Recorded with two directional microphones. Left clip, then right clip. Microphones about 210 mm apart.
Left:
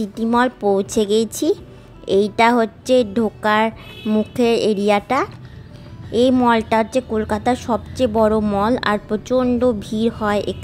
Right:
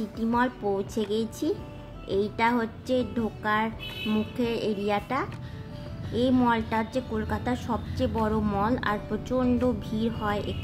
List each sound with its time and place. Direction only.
0.0 s a woman's voice: 35° left (ahead or behind)